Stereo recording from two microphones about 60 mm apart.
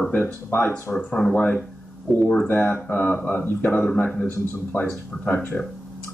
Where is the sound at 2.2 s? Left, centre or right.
Centre.